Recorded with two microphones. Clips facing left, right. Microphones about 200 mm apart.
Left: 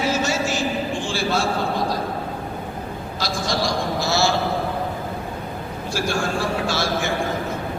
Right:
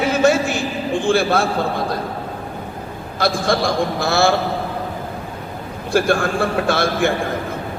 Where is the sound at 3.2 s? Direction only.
55° right (ahead or behind).